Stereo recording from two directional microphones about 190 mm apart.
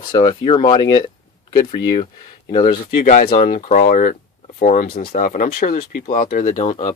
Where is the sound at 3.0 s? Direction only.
40° left (ahead or behind).